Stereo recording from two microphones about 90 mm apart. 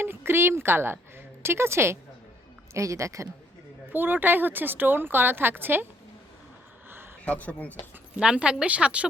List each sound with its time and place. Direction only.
0.0 s a woman's voice: 25° right (ahead or behind)
3.9 s speech: 20° right (ahead or behind)
7.3 s speech: 15° left (ahead or behind)
8.2 s speech: 10° right (ahead or behind)